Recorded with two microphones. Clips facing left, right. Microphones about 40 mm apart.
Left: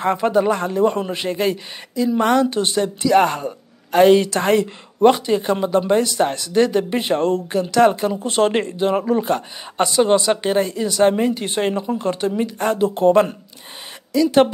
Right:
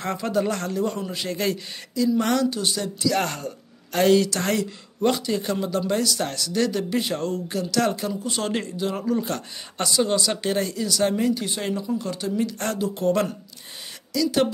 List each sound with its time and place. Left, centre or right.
0.0 s speech: left
8.1 s speech: left